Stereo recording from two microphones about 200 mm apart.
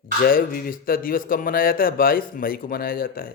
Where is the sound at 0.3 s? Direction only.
45° left (ahead or behind).